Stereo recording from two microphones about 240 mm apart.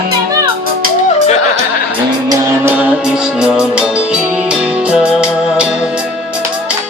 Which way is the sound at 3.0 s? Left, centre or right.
Centre.